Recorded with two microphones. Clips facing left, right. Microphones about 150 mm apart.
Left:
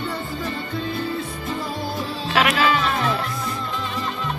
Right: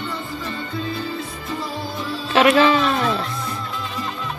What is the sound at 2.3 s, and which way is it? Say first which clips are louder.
Speech: right 5 dB; 30° right (ahead or behind).